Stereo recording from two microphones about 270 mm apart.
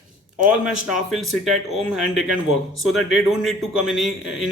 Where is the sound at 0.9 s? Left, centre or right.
Centre.